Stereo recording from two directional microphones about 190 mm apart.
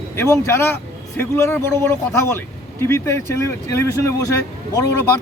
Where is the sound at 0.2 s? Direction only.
15° left (ahead or behind).